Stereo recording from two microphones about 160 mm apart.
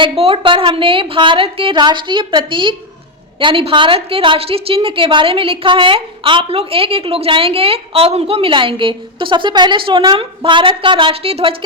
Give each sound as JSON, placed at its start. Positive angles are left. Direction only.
{"t": 0.0, "sound": "a woman's voice", "side_deg": -35}